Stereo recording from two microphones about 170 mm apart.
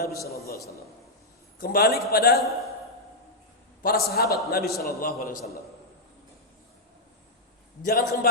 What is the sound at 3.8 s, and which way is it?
A man's voice, 65° left (ahead or behind).